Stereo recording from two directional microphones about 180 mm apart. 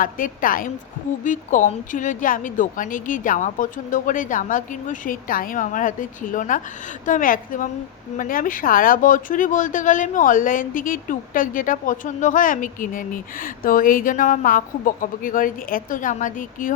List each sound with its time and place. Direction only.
0.0 s speech: 50° left (ahead or behind)